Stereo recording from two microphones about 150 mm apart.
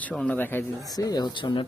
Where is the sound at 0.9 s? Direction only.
25° left (ahead or behind).